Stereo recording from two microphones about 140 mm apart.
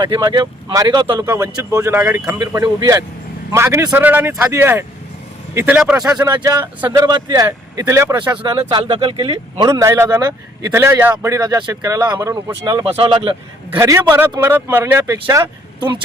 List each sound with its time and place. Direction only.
0.0 s speech: 30° right (ahead or behind)
1.2 s a man's voice: 20° right (ahead or behind)
6.1 s speech: 25° right (ahead or behind)
8.4 s speech: 35° right (ahead or behind)
12.8 s speech: 35° right (ahead or behind)
13.7 s speech: 20° right (ahead or behind)